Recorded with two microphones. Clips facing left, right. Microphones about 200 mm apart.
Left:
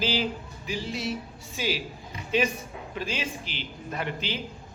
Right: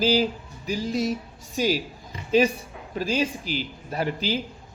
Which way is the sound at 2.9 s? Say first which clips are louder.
Right 8 dB; 40° right (ahead or behind).